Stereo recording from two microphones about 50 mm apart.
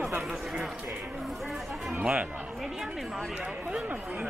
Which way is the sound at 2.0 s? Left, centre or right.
Right.